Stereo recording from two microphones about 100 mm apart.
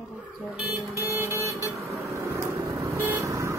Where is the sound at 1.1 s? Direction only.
25° right (ahead or behind).